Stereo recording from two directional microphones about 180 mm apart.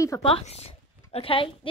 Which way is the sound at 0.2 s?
35° left (ahead or behind).